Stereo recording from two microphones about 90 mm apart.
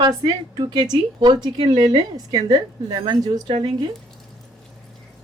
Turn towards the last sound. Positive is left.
turn(degrees=-55)  # may be behind; listen again after turning